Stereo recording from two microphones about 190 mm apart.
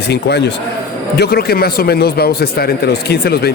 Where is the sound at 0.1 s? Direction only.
60° left (ahead or behind).